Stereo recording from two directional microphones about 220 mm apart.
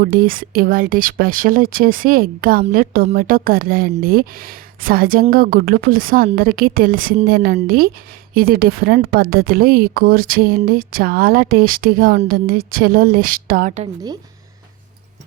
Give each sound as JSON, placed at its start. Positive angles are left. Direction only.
{"t": 0.0, "sound": "speech", "side_deg": -40}